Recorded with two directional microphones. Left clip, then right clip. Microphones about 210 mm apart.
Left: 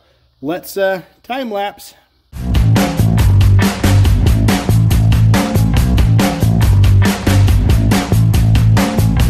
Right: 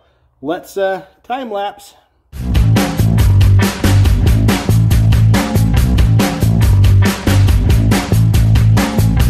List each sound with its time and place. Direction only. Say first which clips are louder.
0.5 s speech: left 1 dB; 40° left (ahead or behind)
2.4 s music: even; centre (ahead or behind)